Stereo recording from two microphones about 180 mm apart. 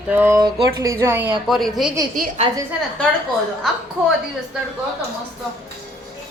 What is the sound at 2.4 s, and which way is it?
Speech, 30° right (ahead or behind).